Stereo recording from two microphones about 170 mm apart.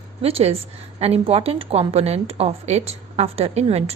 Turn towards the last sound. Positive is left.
turn(degrees=-35)  # may be behind; listen again after turning